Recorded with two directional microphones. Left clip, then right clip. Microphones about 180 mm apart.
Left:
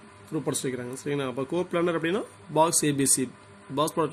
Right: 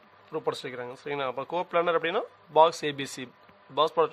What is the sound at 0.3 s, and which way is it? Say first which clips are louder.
Speech: left 1 dB; 45° right (ahead or behind).